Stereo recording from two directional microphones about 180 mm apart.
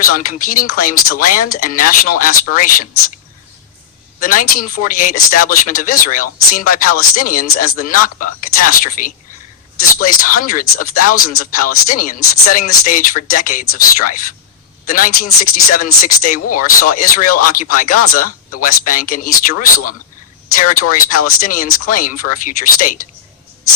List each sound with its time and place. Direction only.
0.1 s speech: 50° left (ahead or behind)
4.2 s speech: 50° left (ahead or behind)